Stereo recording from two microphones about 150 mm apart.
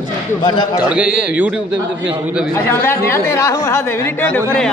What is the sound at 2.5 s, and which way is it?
Speech, 15° left (ahead or behind).